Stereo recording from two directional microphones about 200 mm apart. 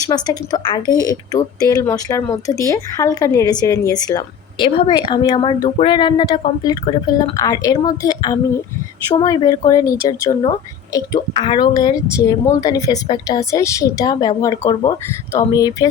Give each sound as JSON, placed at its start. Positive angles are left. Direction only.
{"t": 0.1, "sound": "a woman's voice", "side_deg": 20}